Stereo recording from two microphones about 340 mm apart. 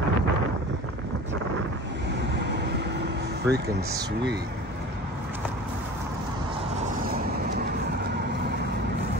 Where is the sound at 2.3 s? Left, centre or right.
Right.